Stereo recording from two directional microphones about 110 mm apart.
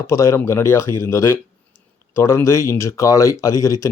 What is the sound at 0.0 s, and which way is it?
Speech, 30° left (ahead or behind).